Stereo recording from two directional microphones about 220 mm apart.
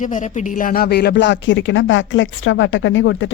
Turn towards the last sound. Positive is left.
turn(degrees=60)  # may be behind; listen again after turning